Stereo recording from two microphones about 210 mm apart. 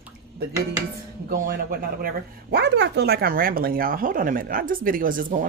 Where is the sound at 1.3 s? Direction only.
45° right (ahead or behind).